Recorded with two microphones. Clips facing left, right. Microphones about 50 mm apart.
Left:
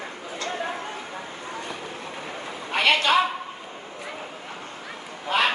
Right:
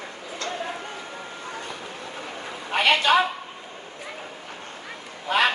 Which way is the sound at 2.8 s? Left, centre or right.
Right.